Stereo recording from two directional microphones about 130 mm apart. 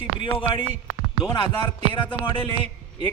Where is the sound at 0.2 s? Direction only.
40° left (ahead or behind).